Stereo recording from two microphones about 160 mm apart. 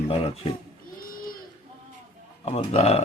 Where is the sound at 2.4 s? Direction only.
35° left (ahead or behind).